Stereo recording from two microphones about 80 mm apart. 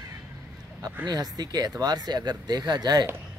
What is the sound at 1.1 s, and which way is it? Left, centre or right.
Speech, right.